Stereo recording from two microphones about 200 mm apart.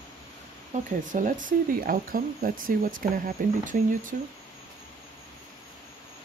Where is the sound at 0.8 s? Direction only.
40° right (ahead or behind).